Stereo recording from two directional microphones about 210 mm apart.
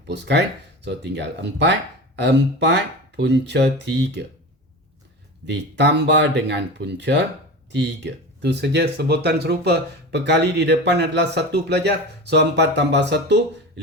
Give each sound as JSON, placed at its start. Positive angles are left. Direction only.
{"t": 0.1, "sound": "speech", "side_deg": -55}
{"t": 5.5, "sound": "speech", "side_deg": -55}